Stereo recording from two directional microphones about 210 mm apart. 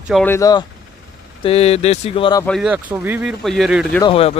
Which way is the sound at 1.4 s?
30° left (ahead or behind).